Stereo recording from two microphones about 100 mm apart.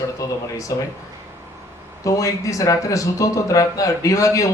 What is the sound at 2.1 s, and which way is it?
Speech, 35° left (ahead or behind).